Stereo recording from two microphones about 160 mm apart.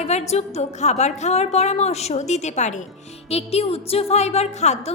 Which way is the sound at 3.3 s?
40° left (ahead or behind).